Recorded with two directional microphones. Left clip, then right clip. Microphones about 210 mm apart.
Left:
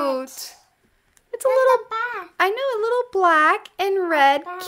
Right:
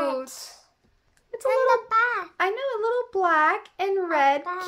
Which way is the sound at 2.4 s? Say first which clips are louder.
Left 9 dB; 45° left (ahead or behind).